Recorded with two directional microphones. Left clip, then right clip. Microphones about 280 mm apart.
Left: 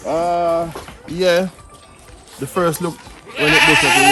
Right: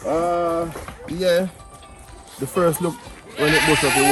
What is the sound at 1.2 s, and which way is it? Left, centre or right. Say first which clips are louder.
Speech: left 4 dB; centre.